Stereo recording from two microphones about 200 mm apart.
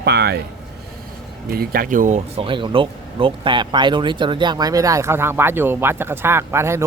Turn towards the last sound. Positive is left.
turn(degrees=-15)  # may be behind; listen again after turning